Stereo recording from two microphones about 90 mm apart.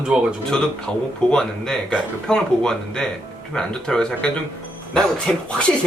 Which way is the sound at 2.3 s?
10° left (ahead or behind).